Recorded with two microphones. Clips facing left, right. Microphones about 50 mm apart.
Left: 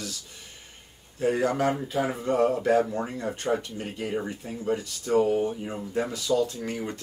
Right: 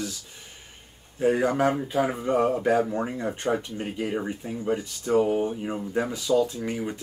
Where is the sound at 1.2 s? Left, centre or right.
Centre.